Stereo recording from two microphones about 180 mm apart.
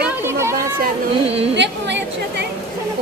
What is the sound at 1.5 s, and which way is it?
Speech, 75° right (ahead or behind).